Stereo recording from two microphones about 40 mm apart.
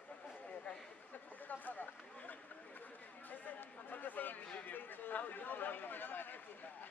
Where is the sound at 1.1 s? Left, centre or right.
Left.